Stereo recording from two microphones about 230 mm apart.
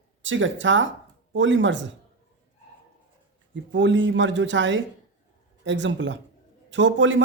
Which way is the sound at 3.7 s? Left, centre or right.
Right.